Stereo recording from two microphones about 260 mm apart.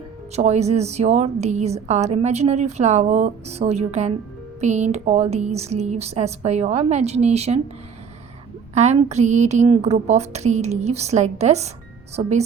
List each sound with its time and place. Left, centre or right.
0.3 s a woman's voice: right
8.7 s a woman's voice: right